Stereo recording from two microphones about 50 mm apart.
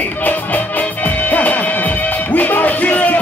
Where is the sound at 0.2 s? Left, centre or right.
Left.